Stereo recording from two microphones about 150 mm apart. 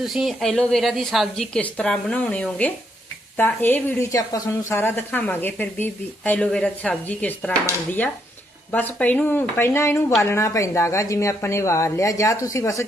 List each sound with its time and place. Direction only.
0.0 s a woman's voice: centre (ahead or behind); by 12.8 s 20° left (ahead or behind)